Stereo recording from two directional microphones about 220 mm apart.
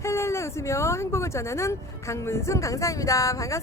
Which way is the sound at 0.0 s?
10° left (ahead or behind).